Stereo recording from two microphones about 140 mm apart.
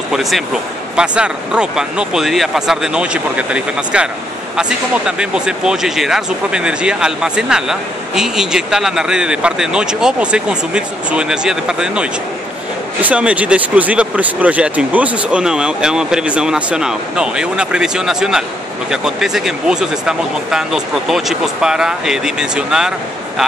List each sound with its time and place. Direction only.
0.1 s speech: centre (ahead or behind)